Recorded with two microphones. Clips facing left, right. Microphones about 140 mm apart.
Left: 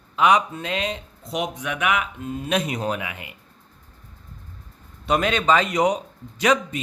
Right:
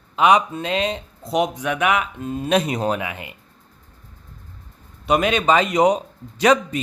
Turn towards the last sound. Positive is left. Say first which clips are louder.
# right 4 dB
turn(degrees=-35)  # may be behind; listen again after turning